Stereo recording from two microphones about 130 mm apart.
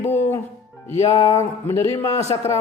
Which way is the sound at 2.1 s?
55° left (ahead or behind).